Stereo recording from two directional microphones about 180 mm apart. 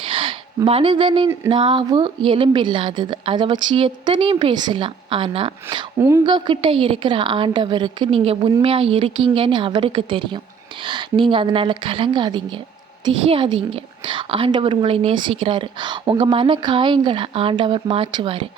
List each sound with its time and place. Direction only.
0.1 s a sound: 30° right (ahead or behind)
1.5 s a woman's voice: 30° right (ahead or behind)
6.0 s a woman's voice: 15° right (ahead or behind)
6.2 s a woman's voice: 25° right (ahead or behind)